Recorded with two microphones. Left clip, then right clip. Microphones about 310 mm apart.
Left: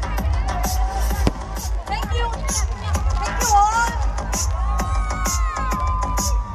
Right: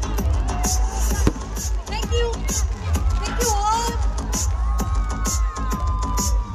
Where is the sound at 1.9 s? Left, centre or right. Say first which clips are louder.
Right 1 dB; centre.